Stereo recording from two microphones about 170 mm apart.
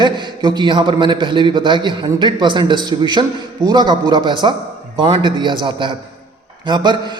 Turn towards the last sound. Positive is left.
turn(degrees=-25)  # may be behind; listen again after turning